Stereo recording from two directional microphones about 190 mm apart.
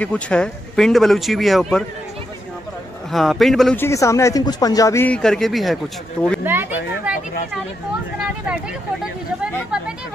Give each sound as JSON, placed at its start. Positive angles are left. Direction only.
{"t": 0.0, "sound": "a man's voice", "side_deg": 5}
{"t": 3.1, "sound": "a man's voice", "side_deg": 0}
{"t": 3.8, "sound": "speech", "side_deg": 15}
{"t": 6.4, "sound": "speech", "side_deg": -10}